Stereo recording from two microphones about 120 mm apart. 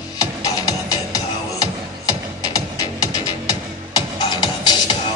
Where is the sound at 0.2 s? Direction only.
35° left (ahead or behind).